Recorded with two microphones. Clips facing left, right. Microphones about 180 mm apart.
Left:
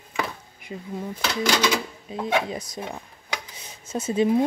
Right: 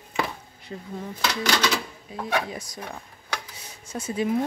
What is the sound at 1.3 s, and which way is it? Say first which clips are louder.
Speech: left 4 dB; 15° left (ahead or behind).